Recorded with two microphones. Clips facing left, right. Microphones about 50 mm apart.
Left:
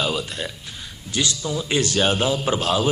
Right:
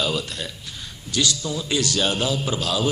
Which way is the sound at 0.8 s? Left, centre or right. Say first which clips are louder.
Right 1 dB; left.